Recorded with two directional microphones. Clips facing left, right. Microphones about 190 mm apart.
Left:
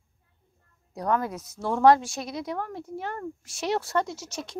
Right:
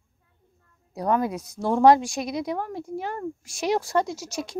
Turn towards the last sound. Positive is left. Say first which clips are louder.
# right 4 dB
turn(degrees=-10)  # may be behind; listen again after turning